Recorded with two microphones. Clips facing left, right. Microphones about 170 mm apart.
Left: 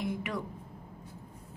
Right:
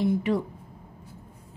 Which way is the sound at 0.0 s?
30° right (ahead or behind).